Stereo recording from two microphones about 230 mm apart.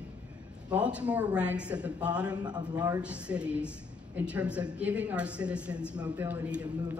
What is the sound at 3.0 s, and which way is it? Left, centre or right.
A woman's voice, centre.